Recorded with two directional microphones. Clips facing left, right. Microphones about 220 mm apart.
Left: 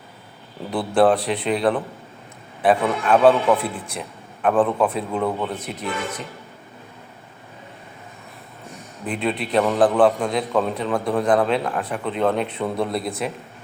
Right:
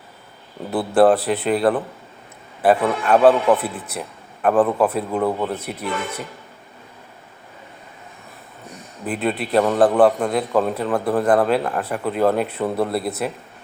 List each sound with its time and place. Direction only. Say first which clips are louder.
0.7 s a man's voice: right 2 dB; 5° right (ahead or behind)
9.0 s a man's voice: right 1 dB; 5° right (ahead or behind)